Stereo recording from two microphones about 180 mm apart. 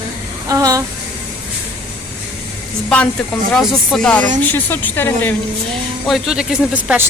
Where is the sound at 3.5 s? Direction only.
Centre (ahead or behind).